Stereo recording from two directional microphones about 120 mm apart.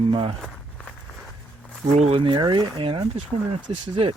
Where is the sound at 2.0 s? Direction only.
50° right (ahead or behind).